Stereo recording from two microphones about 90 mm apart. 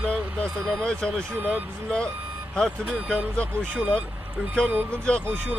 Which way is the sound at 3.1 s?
10° left (ahead or behind).